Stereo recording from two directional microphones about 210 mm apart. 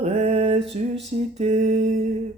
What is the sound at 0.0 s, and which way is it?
Mantra, 30° right (ahead or behind).